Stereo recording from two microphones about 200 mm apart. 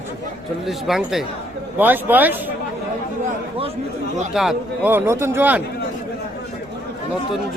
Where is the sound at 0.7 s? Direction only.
Centre (ahead or behind).